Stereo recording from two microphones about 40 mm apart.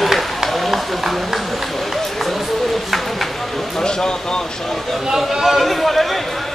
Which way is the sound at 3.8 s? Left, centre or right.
Centre.